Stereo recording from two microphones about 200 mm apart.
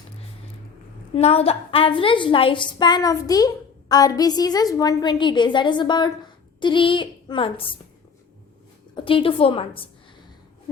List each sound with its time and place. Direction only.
1.1 s a woman's voice: 30° left (ahead or behind)
9.0 s a woman's voice: 25° left (ahead or behind)